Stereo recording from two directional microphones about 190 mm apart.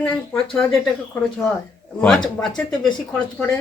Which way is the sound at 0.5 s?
5° left (ahead or behind).